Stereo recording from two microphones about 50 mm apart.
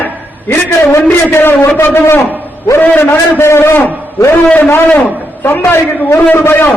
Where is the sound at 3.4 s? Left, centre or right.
Left.